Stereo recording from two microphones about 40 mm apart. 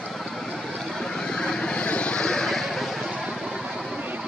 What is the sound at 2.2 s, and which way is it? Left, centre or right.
Vehicle, centre.